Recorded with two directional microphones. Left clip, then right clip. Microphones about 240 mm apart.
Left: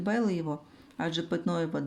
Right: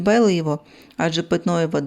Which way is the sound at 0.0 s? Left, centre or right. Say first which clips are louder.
Right 13 dB; right.